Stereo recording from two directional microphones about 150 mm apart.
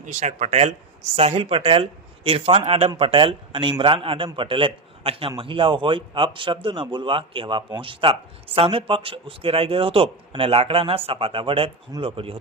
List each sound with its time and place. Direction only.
0.0 s a man's voice: 50° right (ahead or behind)